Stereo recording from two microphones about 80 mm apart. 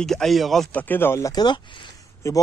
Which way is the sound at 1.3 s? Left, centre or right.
Left.